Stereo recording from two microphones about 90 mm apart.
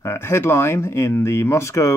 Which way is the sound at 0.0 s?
30° left (ahead or behind).